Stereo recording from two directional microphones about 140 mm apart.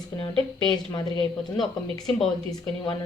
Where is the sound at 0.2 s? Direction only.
35° left (ahead or behind).